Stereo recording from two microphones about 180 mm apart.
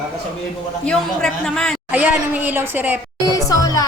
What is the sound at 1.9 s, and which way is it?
A woman's voice, 10° right (ahead or behind).